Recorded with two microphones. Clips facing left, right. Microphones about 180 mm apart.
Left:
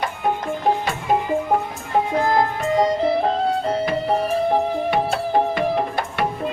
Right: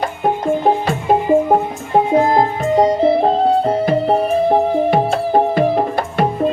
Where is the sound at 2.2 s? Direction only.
30° right (ahead or behind).